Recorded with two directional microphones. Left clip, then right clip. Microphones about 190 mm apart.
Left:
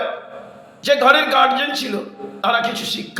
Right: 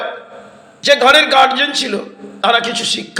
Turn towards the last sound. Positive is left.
turn(degrees=-20)  # may be behind; listen again after turning